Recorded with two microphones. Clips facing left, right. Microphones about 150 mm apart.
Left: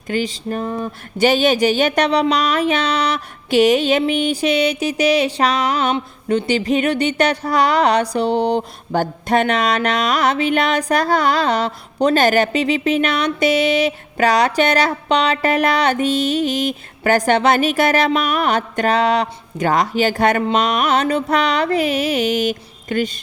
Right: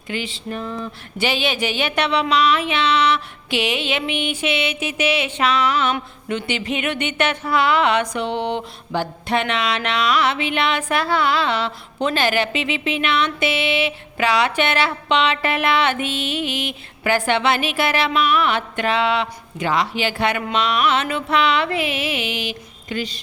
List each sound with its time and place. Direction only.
0.1 s speech: 40° left (ahead or behind)
20.4 s music: 45° left (ahead or behind)